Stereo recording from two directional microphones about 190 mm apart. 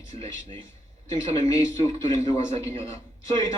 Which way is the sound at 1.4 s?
15° left (ahead or behind).